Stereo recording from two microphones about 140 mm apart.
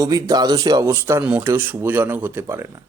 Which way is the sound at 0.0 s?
25° right (ahead or behind).